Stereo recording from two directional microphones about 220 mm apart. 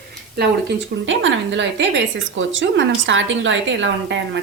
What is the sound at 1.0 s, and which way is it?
A woman's voice, 55° right (ahead or behind).